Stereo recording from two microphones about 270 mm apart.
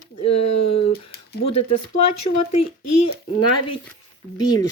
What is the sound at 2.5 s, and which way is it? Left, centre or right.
Speech, left.